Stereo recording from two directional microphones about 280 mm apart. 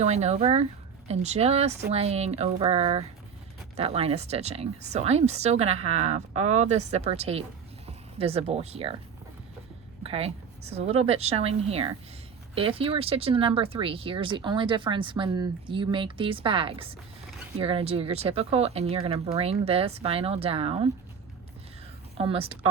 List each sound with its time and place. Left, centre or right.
0.0 s speech: right
10.0 s speech: right
22.2 s speech: centre